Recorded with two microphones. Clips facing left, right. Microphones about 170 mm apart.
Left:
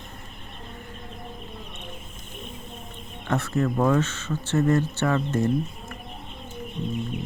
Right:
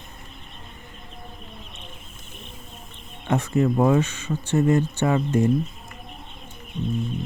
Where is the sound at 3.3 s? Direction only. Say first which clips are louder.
Right 3 dB; 15° right (ahead or behind).